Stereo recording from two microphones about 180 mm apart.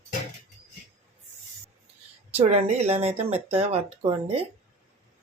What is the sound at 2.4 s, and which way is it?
Speech, 35° right (ahead or behind).